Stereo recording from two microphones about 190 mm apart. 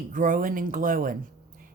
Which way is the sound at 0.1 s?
45° right (ahead or behind).